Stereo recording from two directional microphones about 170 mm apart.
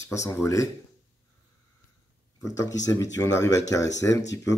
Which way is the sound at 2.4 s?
20° left (ahead or behind).